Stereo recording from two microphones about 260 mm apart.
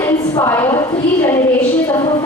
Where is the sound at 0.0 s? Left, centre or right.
Centre.